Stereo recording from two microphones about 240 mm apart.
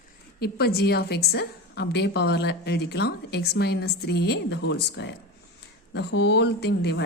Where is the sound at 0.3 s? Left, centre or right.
Left.